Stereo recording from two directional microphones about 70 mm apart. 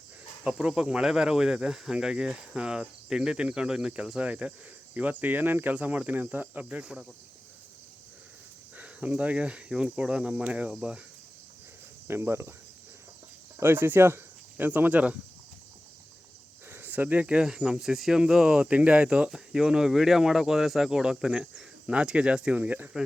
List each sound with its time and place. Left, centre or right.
0.4 s speech: centre
8.8 s speech: centre
12.0 s speech: right
13.6 s speech: right
16.6 s cricket: right
16.9 s speech: right